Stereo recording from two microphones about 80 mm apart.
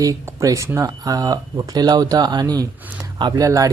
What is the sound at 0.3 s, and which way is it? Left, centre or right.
Speech, right.